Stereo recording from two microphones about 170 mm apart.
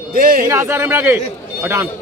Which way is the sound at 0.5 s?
15° right (ahead or behind).